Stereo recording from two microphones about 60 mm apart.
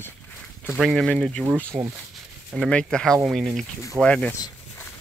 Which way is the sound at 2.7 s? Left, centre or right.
Centre.